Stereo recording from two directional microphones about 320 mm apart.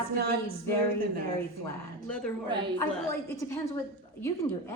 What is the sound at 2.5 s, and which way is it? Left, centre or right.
Speech, centre.